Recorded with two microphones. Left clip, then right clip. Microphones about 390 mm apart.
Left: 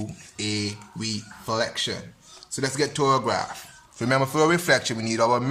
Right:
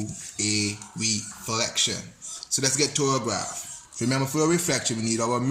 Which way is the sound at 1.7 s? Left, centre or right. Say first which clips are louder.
Right 2 dB; centre.